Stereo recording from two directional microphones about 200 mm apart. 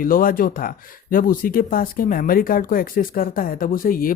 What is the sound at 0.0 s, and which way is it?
Speech, 45° left (ahead or behind).